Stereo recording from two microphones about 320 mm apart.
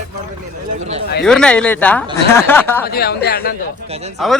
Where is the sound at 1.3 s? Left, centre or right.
Centre.